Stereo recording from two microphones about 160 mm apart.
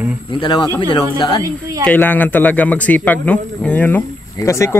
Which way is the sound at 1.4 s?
20° right (ahead or behind).